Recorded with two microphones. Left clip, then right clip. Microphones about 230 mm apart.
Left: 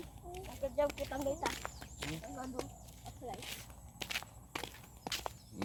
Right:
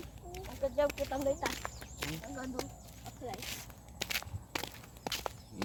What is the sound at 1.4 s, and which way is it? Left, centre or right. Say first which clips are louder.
Speech: right 2 dB; right.